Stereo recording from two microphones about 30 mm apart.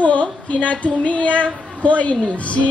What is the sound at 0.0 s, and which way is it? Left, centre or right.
Female singing, left.